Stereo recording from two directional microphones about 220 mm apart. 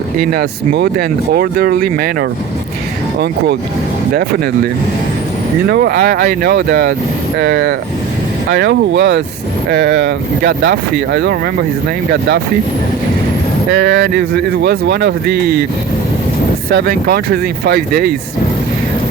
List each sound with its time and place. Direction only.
0.3 s speech: 45° right (ahead or behind)
5.6 s speech: 45° right (ahead or behind)
13.7 s speech: 45° right (ahead or behind)
16.6 s speech: 45° right (ahead or behind)